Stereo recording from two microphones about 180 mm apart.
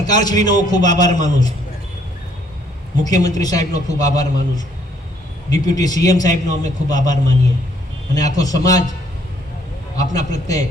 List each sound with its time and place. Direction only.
0.2 s a man's voice: 20° left (ahead or behind)
3.0 s a man's voice: 20° left (ahead or behind)
10.1 s a man's voice: 20° left (ahead or behind)